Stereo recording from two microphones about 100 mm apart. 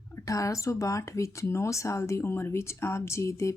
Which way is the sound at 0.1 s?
30° left (ahead or behind).